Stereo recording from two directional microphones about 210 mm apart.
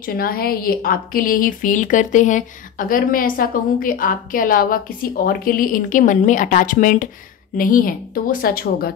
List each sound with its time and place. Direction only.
0.0 s a woman's voice: 45° left (ahead or behind)